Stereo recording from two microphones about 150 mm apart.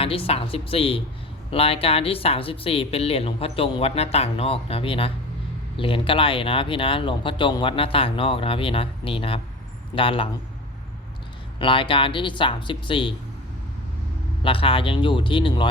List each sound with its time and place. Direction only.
0.0 s speech: 40° left (ahead or behind)
11.6 s speech: 35° left (ahead or behind)
14.4 s speech: 35° left (ahead or behind)